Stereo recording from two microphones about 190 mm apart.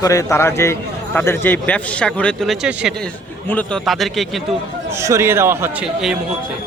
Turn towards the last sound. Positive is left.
turn(degrees=-15)  # may be behind; listen again after turning